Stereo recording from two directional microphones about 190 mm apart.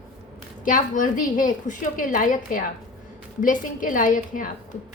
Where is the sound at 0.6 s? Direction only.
45° left (ahead or behind).